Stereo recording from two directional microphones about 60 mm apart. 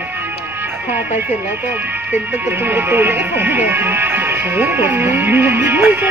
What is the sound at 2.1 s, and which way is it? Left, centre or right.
Speech, right.